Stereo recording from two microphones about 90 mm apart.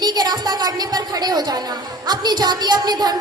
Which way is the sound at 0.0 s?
50° right (ahead or behind).